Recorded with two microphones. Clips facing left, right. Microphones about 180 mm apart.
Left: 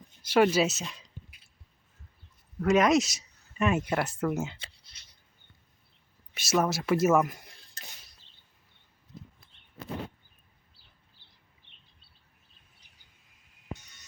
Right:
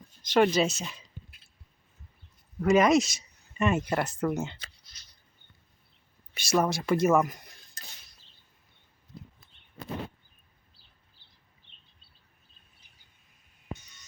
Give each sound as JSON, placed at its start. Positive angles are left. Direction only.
{"t": 0.2, "sound": "speech", "side_deg": 5}
{"t": 2.6, "sound": "speech", "side_deg": 0}
{"t": 4.9, "sound": "a sound", "side_deg": 30}
{"t": 6.3, "sound": "speech", "side_deg": 0}